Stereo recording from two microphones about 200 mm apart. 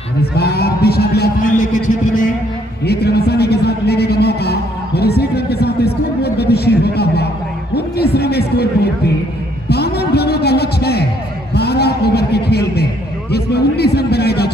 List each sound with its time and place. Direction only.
0.2 s a man's voice: 50° left (ahead or behind)
2.8 s a man's voice: 55° left (ahead or behind)
9.7 s a sound: 55° left (ahead or behind)